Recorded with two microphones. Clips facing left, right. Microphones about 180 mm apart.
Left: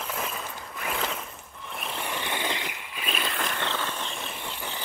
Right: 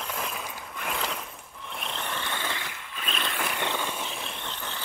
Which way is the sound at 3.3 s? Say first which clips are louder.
Even; 10° right (ahead or behind).